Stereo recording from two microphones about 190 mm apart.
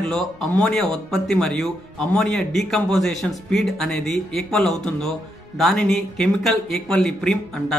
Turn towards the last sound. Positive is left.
turn(degrees=5)  # may be behind; listen again after turning